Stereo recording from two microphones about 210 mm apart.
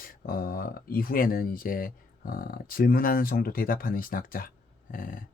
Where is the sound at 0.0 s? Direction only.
45° left (ahead or behind).